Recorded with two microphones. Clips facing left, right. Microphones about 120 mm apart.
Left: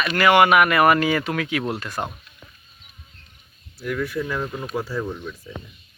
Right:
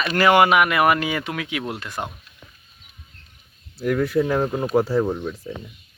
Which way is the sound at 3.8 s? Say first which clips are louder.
Right 6 dB; 40° right (ahead or behind).